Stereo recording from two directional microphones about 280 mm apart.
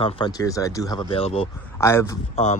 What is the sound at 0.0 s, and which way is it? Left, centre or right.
Speech, centre.